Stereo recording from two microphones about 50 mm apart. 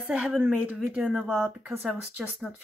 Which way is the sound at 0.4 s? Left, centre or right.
Right.